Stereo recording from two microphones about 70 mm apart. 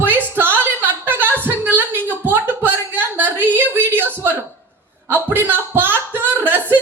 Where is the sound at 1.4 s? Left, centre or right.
Right.